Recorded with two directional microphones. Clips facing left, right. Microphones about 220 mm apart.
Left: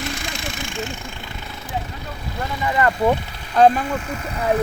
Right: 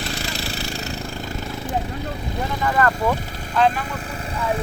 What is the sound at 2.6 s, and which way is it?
Speech, 15° left (ahead or behind).